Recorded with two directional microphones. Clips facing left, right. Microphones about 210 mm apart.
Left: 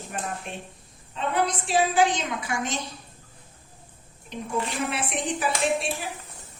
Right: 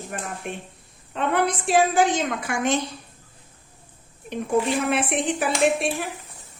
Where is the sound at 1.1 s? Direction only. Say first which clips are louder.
Right 3 dB; 60° right (ahead or behind).